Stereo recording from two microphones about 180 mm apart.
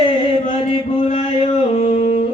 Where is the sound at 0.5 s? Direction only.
30° left (ahead or behind).